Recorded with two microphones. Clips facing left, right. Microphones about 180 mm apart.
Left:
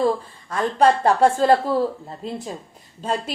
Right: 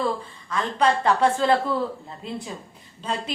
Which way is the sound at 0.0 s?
45° left (ahead or behind).